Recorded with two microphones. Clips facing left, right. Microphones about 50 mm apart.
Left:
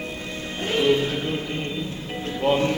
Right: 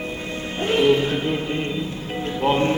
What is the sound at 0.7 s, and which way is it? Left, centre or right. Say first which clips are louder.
Music: right 3 dB; centre.